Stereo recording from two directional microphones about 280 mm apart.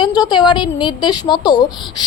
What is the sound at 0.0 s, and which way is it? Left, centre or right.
A woman's voice, centre.